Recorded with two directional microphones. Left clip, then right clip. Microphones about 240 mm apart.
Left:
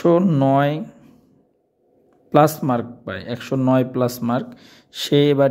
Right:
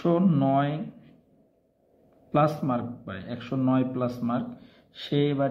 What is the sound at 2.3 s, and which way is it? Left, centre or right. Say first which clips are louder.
Speech: left 9 dB; left.